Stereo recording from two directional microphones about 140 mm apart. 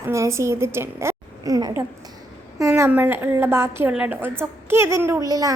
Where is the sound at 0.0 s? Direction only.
20° right (ahead or behind).